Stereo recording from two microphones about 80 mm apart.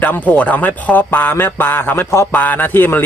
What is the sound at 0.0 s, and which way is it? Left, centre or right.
A man's voice, left.